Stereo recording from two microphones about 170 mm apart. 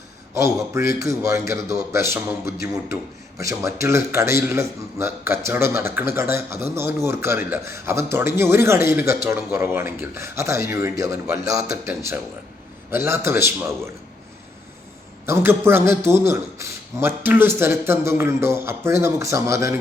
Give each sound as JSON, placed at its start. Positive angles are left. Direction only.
{"t": 0.3, "sound": "a man's voice", "side_deg": -15}
{"t": 12.9, "sound": "a man's voice", "side_deg": -15}
{"t": 15.3, "sound": "a man's voice", "side_deg": -15}